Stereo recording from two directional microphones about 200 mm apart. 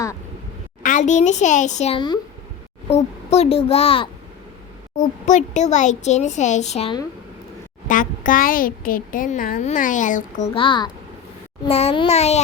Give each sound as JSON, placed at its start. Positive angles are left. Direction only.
{"t": 0.8, "sound": "a woman's voice", "side_deg": 40}
{"t": 7.9, "sound": "a woman's voice", "side_deg": 40}